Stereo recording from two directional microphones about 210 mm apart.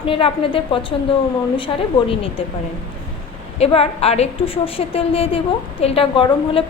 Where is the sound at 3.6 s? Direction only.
30° left (ahead or behind).